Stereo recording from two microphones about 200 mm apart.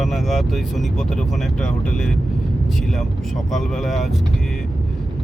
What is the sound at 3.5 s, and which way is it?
Speech, centre (ahead or behind).